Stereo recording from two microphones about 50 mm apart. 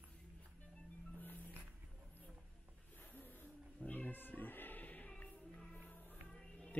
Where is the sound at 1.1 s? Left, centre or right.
Left.